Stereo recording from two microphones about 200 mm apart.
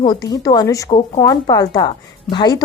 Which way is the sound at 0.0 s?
20° left (ahead or behind).